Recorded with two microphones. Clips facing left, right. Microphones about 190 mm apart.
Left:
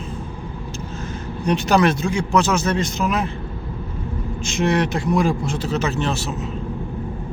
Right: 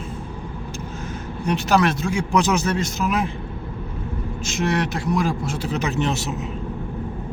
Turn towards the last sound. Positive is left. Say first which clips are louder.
# even
turn(degrees=-20)  # may be behind; listen again after turning